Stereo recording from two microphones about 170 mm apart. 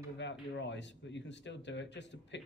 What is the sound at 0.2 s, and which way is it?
Speech, 90° left.